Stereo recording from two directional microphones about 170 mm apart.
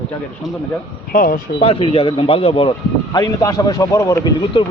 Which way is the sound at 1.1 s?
60° left (ahead or behind).